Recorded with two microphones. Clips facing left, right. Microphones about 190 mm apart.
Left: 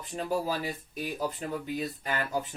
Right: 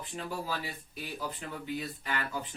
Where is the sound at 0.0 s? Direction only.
40° left (ahead or behind).